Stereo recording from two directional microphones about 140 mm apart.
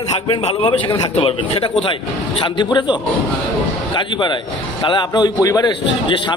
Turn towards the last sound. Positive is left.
turn(degrees=25)  # may be behind; listen again after turning